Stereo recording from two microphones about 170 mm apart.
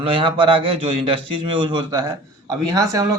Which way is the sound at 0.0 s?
30° right (ahead or behind).